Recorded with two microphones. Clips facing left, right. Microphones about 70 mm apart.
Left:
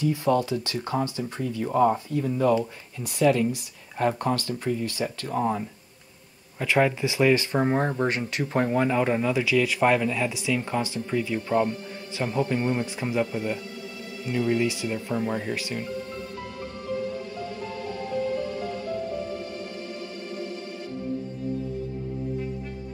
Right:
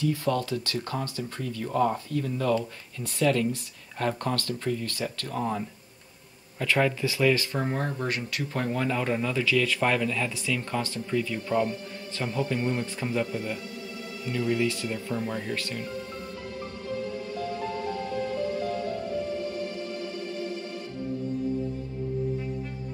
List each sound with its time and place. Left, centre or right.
0.0 s speech: centre